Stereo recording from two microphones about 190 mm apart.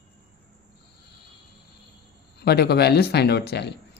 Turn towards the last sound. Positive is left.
turn(degrees=60)  # may be behind; listen again after turning